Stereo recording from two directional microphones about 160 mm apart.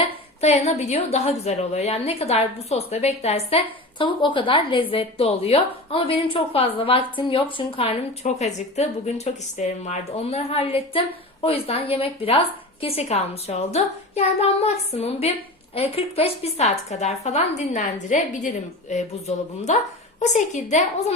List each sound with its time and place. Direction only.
0.4 s a woman's voice: 45° left (ahead or behind)